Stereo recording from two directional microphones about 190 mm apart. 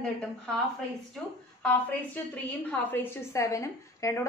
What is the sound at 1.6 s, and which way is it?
A woman's voice, 10° left (ahead or behind).